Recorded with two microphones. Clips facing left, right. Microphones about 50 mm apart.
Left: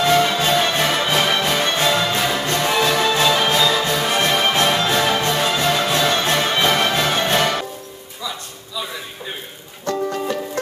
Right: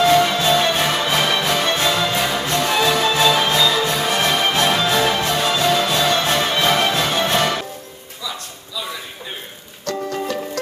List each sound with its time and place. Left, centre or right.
0.0 s music: centre
9.9 s music: left